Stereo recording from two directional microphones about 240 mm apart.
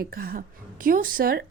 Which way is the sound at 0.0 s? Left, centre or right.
Right.